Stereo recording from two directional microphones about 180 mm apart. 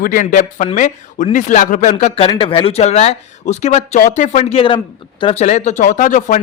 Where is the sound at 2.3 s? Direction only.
30° left (ahead or behind).